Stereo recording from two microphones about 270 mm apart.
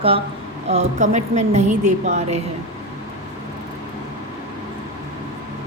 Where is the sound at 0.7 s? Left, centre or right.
Right.